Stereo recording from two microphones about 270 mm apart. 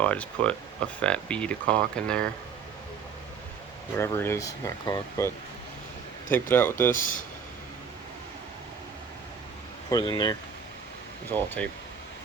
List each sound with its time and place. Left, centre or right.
0.0 s speech: centre
3.9 s speech: centre
6.5 s speech: centre
6.9 s speech: left
9.9 s speech: centre
11.3 s speech: centre